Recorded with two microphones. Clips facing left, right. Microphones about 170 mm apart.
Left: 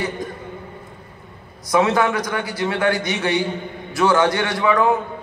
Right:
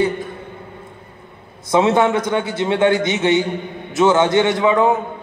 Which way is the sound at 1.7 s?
25° right (ahead or behind).